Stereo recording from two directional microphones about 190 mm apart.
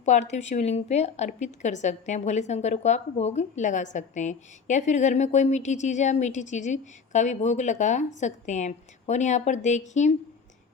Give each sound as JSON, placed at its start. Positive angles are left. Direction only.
{"t": 0.0, "sound": "a woman's voice", "side_deg": 40}